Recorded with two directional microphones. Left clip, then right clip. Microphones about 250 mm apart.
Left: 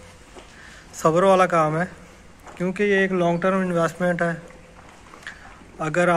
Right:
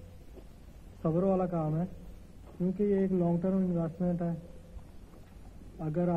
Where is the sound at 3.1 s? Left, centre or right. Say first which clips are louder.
Left 11 dB; centre.